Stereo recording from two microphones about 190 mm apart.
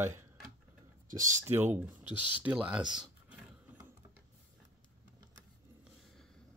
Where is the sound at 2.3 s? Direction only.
5° right (ahead or behind).